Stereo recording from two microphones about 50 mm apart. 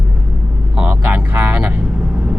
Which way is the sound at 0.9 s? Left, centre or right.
Right.